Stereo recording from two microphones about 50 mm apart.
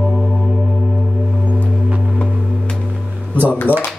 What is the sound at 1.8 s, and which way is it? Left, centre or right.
Music, right.